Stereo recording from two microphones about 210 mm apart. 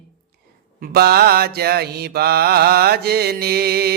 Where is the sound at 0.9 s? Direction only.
50° right (ahead or behind).